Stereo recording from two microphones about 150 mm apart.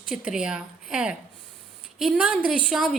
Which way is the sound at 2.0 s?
5° right (ahead or behind).